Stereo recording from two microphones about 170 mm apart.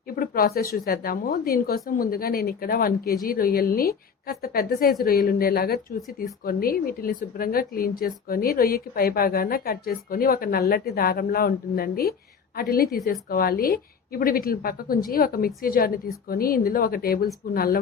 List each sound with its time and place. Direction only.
0.2 s speech: 60° left (ahead or behind)